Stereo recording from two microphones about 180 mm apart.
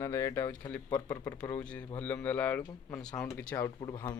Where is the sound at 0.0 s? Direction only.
15° left (ahead or behind).